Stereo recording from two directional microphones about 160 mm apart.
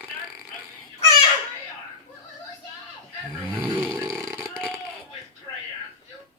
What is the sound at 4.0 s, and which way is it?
Vehicle, 20° right (ahead or behind).